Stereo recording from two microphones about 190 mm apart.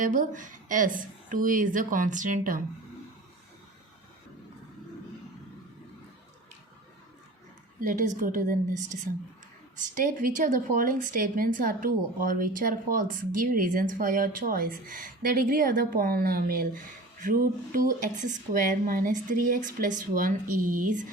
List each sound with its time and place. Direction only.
0.0 s speech: 45° right (ahead or behind)
7.8 s speech: 45° right (ahead or behind)